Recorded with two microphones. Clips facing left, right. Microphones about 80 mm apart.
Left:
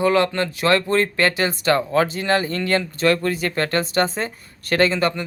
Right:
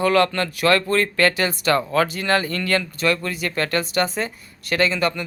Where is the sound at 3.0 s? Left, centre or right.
Left.